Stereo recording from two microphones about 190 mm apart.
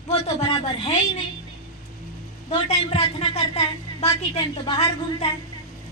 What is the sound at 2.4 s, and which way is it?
A man's voice, 30° left (ahead or behind).